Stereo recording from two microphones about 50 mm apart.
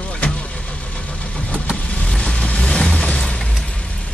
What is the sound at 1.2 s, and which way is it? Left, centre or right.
Vehicle, centre.